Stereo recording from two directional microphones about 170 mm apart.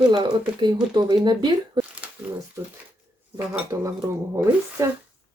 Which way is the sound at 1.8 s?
25° right (ahead or behind).